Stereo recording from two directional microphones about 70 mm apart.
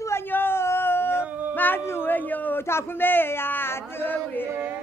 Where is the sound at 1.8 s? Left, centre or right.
Left.